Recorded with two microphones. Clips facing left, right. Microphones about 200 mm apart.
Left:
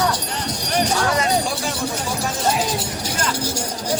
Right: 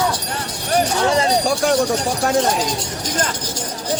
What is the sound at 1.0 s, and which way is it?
Speech, 25° right (ahead or behind).